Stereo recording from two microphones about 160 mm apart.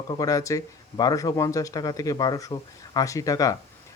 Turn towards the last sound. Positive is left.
turn(degrees=20)  # may be behind; listen again after turning